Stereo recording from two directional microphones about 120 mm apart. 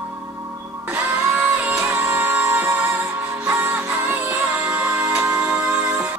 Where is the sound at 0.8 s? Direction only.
15° right (ahead or behind).